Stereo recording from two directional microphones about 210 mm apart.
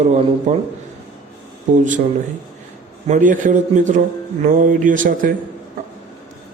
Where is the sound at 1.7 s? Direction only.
35° right (ahead or behind).